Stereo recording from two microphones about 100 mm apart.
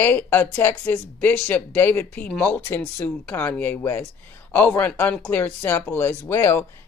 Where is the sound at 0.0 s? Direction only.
20° left (ahead or behind).